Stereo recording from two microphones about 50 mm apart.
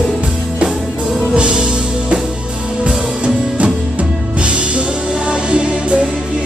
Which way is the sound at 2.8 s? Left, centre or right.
Right.